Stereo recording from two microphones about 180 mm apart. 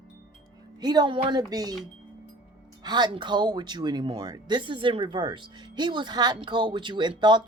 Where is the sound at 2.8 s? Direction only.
25° right (ahead or behind).